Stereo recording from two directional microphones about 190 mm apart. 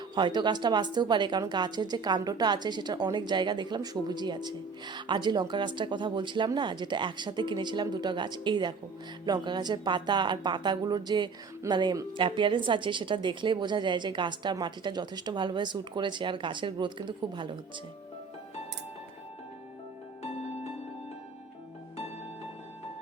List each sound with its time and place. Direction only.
0.1 s a woman's voice: 20° right (ahead or behind)